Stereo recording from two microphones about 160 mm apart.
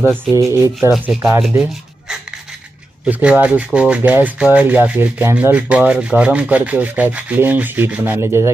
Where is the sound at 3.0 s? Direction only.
5° right (ahead or behind).